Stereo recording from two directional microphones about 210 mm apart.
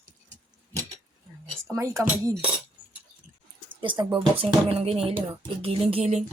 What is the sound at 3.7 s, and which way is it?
Speech, 25° right (ahead or behind).